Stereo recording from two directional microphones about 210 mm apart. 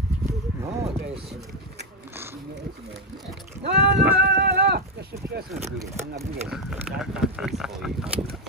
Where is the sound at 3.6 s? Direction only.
55° right (ahead or behind).